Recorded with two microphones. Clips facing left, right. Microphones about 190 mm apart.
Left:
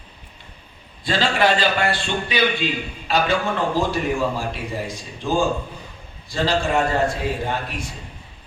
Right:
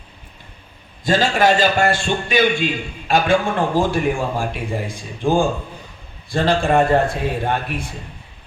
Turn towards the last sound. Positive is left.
turn(degrees=-55)  # may be behind; listen again after turning